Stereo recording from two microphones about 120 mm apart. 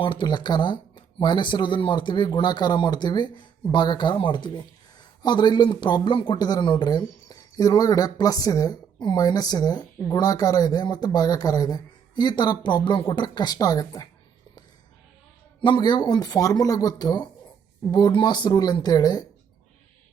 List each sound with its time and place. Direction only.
0.0 s speech: 45° left (ahead or behind)
15.6 s speech: 40° left (ahead or behind)